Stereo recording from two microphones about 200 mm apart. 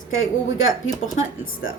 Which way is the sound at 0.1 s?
80° left.